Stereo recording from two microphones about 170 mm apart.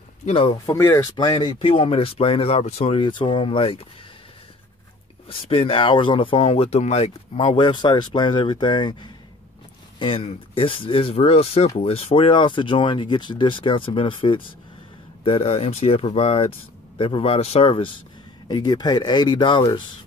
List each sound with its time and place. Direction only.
0.2 s speech: 35° left (ahead or behind)
0.7 s speech: 15° left (ahead or behind); by 3.8 s 35° left (ahead or behind)
5.3 s speech: 35° left (ahead or behind)
9.9 s speech: 30° left (ahead or behind)